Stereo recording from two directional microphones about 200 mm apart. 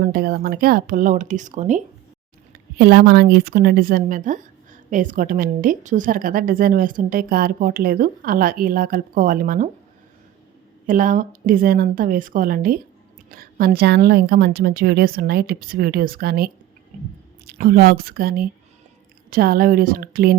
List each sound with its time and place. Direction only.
0.0 s a woman's voice: 50° right (ahead or behind)
2.7 s a woman's voice: 50° right (ahead or behind)
10.8 s a woman's voice: 40° right (ahead or behind)